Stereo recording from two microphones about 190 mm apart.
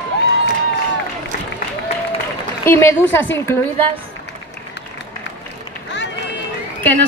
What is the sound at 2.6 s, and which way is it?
Speech, 15° left (ahead or behind).